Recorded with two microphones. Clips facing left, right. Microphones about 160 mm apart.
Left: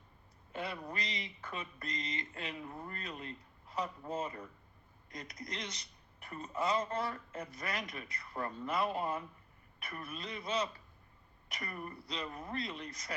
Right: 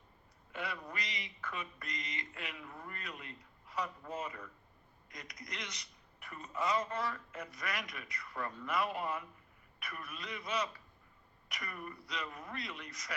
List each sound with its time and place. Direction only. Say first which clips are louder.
0.5 s a man's voice: left 2 dB; 30° left (ahead or behind)